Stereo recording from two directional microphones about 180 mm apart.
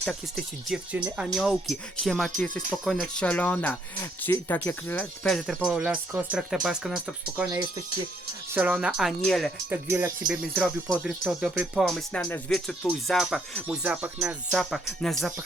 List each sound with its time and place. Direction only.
0.0 s speech: centre (ahead or behind)
8.5 s speech: 10° right (ahead or behind)
9.6 s speech: 10° right (ahead or behind)
10.5 s speech: 5° left (ahead or behind)